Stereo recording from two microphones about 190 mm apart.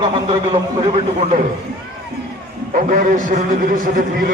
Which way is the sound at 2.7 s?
45° right (ahead or behind).